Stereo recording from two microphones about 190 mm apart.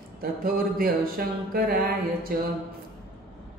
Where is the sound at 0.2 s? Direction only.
50° right (ahead or behind).